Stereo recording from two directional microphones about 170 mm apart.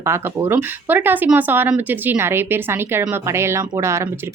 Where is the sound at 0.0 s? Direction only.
15° right (ahead or behind).